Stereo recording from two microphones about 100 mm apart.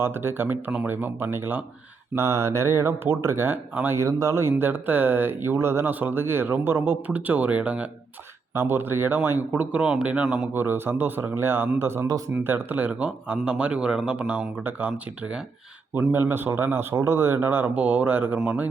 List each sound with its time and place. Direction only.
0.0 s speech: 25° right (ahead or behind)
10.5 s speech: 20° right (ahead or behind)